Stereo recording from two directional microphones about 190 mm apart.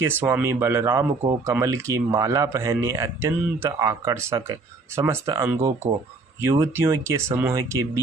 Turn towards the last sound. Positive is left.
turn(degrees=-15)  # may be behind; listen again after turning